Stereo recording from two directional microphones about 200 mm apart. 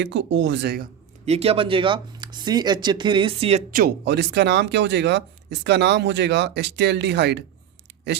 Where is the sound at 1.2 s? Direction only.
30° right (ahead or behind).